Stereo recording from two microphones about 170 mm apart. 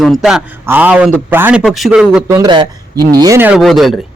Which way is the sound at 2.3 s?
25° right (ahead or behind).